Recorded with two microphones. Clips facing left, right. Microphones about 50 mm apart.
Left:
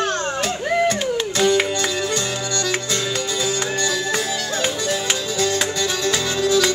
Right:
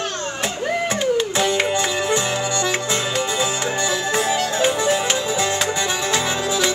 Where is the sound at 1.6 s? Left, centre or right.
Right.